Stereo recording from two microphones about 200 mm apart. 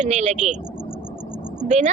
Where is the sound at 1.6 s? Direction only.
35° right (ahead or behind).